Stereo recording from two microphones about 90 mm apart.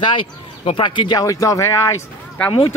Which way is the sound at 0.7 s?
65° left (ahead or behind).